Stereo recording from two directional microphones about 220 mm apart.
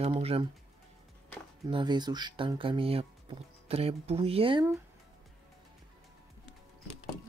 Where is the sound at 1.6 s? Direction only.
20° right (ahead or behind).